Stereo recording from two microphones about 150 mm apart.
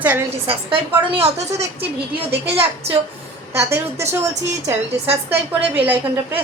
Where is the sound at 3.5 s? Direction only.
15° right (ahead or behind).